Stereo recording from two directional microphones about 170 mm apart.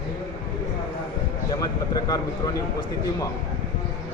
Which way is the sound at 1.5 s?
20° left (ahead or behind).